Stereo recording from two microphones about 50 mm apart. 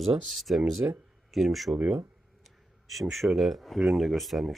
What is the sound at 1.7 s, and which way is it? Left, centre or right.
Speech, centre.